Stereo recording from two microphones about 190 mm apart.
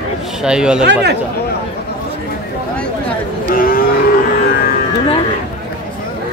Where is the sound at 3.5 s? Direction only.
50° left (ahead or behind).